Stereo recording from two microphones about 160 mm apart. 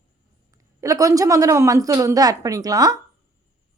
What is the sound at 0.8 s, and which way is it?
A woman's voice, 20° right (ahead or behind).